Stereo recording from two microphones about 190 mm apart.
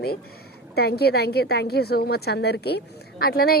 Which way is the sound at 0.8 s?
55° left (ahead or behind).